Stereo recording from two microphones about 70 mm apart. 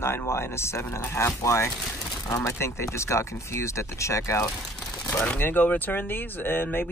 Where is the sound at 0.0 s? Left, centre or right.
Left.